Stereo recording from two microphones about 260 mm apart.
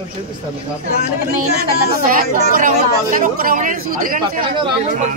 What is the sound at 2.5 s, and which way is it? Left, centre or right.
Speech, right.